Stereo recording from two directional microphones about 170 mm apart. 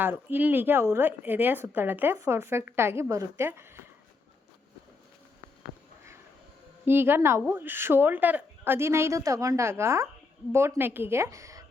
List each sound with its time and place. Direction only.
0.0 s a woman's voice: 10° right (ahead or behind)
6.8 s a woman's voice: 15° right (ahead or behind)